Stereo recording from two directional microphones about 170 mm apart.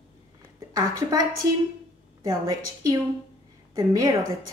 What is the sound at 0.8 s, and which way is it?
Speech, 20° right (ahead or behind).